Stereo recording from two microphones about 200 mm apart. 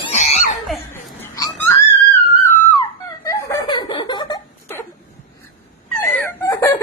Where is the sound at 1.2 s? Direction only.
15° left (ahead or behind).